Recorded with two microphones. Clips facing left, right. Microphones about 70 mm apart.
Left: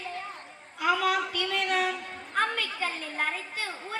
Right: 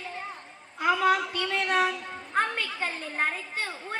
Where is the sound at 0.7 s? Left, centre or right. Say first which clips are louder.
Right 2 dB; right.